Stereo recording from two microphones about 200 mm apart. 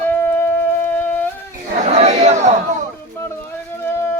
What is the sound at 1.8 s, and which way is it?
Chatter, 35° right (ahead or behind).